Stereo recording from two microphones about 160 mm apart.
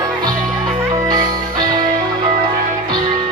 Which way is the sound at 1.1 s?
25° right (ahead or behind).